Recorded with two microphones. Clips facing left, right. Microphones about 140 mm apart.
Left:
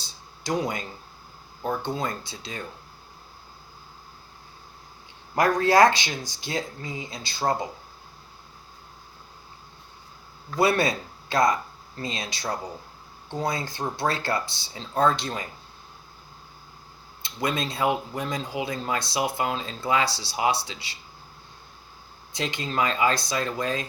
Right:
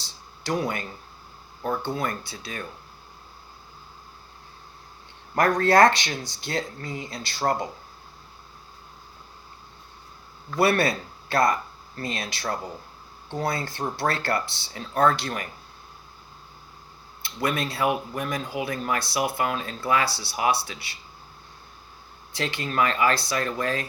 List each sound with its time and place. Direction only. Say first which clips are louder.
0.0 s a sound: right 1 dB; 15° left (ahead or behind)
1.6 s speech: right 1 dB; 20° left (ahead or behind)
5.3 s speech: even; 10° left (ahead or behind)
10.6 s speech: right 1 dB; 20° left (ahead or behind)
17.2 s speech: right 1 dB; 20° left (ahead or behind)
22.3 s speech: right 1 dB; 20° left (ahead or behind)